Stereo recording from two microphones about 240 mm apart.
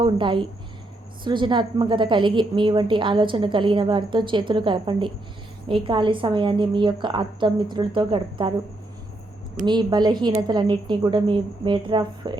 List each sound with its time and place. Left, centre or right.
0.0 s a woman's voice: right
9.6 s a woman's voice: centre